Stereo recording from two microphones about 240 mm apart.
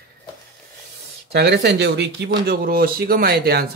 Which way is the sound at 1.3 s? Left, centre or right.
Right.